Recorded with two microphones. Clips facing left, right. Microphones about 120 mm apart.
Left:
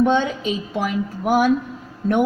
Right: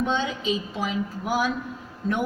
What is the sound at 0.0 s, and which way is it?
A woman's voice, 55° left (ahead or behind).